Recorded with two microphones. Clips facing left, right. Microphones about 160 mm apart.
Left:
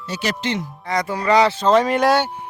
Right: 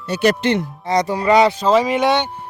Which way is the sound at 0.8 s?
20° right (ahead or behind).